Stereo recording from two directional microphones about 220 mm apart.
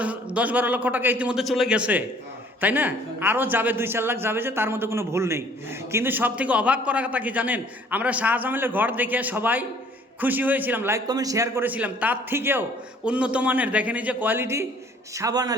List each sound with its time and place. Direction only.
0.0 s a man's voice: 5° right (ahead or behind)